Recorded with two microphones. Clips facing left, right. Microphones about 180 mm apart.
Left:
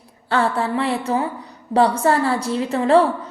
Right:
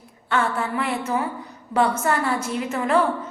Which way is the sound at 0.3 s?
35° left (ahead or behind).